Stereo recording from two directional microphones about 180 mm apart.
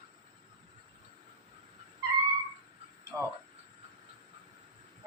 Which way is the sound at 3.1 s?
10° right (ahead or behind).